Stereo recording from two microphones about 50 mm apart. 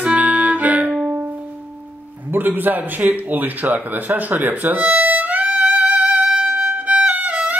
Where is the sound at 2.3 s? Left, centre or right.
Right.